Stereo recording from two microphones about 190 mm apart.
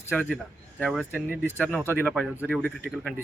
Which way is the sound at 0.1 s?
5° left (ahead or behind).